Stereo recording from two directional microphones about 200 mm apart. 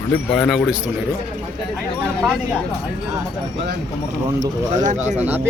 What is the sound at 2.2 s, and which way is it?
Speech, 5° right (ahead or behind).